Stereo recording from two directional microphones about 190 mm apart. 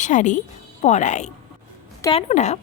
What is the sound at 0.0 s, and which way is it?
Speech, 40° left (ahead or behind).